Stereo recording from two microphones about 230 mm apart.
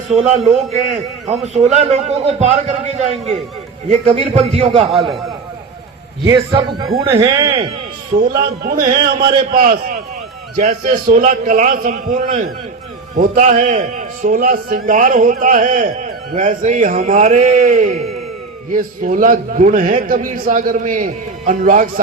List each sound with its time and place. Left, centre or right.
1.3 s a man's voice: right
6.2 s a man's voice: centre
8.6 s a man's voice: right